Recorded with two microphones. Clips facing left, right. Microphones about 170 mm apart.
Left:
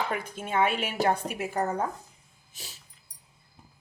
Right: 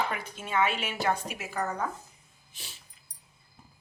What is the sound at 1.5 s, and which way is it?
Speech, 30° left (ahead or behind).